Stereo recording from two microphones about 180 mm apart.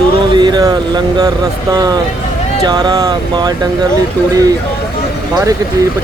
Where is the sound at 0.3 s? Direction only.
25° right (ahead or behind).